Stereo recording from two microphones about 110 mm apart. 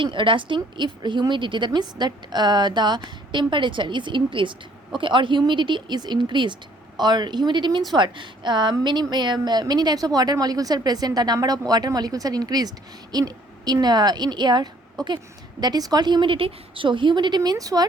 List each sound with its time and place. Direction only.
0.0 s a woman's voice: 50° right (ahead or behind); by 17.8 s 35° right (ahead or behind)